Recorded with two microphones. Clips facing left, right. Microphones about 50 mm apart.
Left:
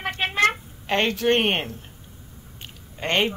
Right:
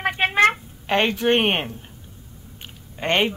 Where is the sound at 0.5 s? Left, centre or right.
Centre.